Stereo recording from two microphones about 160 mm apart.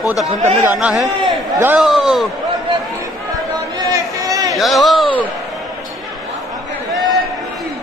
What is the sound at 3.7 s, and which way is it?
Chatter, 20° right (ahead or behind).